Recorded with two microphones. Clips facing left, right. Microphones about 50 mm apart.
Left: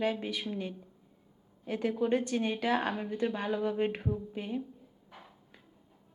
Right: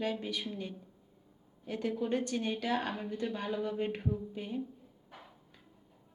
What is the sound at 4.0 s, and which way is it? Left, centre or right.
Speech, centre.